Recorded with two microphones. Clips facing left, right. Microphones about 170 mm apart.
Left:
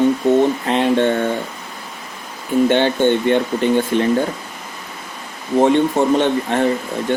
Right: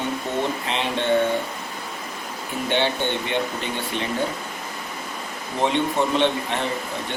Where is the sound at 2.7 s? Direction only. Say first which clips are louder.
Left 4 dB; 50° left (ahead or behind).